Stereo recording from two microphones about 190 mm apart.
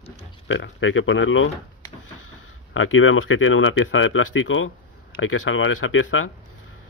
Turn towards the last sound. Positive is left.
turn(degrees=90)